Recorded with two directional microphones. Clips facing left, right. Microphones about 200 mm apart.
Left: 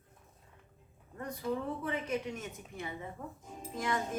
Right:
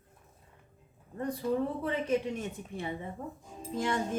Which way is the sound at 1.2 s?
35° right (ahead or behind).